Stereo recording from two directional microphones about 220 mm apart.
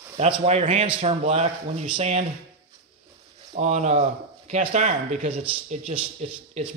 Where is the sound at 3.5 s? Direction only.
30° right (ahead or behind).